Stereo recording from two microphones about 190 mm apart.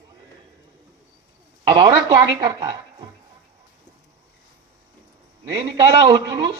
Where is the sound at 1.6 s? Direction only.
20° right (ahead or behind).